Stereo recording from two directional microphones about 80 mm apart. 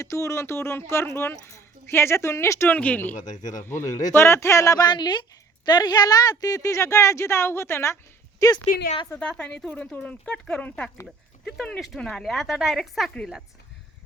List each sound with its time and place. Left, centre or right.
0.0 s a woman's voice: left
2.7 s speech: centre
3.6 s a woman's voice: left
4.9 s a woman's voice: left
9.4 s a woman's voice: centre